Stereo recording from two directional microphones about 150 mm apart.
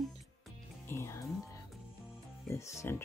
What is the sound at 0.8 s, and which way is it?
Speech, 15° left (ahead or behind).